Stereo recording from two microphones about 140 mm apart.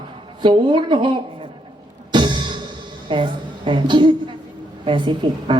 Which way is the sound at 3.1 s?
35° right (ahead or behind).